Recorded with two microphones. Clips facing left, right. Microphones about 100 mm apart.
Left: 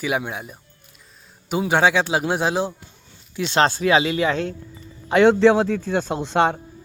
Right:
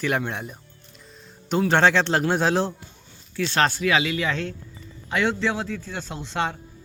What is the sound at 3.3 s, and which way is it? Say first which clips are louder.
Speech: left 3 dB; 20° left (ahead or behind).